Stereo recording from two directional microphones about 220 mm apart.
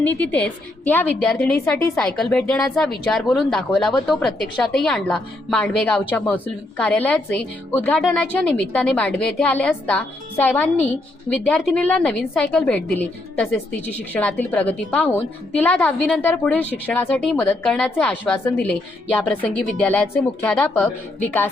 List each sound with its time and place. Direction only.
0.0 s a woman's voice: 5° left (ahead or behind)